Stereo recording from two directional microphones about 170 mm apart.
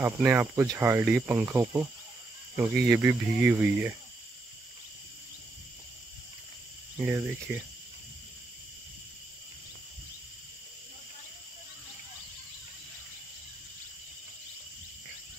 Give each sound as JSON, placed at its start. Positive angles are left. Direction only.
{"t": 0.0, "sound": "speech", "side_deg": -10}
{"t": 7.1, "sound": "speech", "side_deg": -10}